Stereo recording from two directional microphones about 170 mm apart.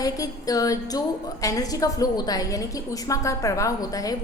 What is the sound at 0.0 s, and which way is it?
A woman's voice, 20° left (ahead or behind).